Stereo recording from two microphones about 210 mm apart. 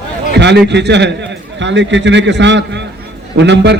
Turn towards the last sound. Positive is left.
turn(degrees=-55)  # may be behind; listen again after turning